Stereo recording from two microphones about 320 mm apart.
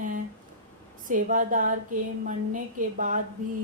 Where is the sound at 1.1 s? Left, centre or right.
Right.